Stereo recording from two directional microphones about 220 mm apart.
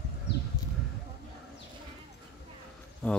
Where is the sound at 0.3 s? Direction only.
50° left (ahead or behind).